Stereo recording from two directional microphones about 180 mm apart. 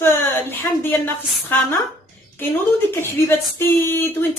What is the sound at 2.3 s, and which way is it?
Speech, 10° left (ahead or behind).